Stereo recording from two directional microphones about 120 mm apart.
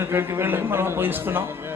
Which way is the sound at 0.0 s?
20° right (ahead or behind).